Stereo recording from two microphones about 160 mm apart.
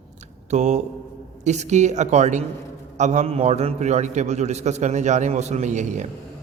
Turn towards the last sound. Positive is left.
turn(degrees=-50)  # may be behind; listen again after turning